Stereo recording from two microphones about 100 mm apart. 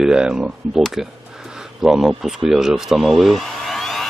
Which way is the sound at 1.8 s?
5° right (ahead or behind).